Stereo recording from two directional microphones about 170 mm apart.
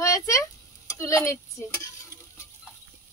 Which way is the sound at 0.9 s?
15° left (ahead or behind).